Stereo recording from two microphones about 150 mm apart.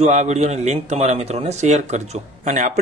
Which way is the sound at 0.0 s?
50° right (ahead or behind).